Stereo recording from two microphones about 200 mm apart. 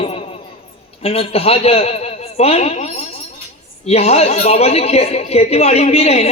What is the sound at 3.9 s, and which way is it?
Speech, 30° left (ahead or behind).